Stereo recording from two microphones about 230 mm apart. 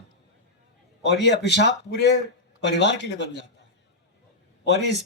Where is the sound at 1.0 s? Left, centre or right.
Left.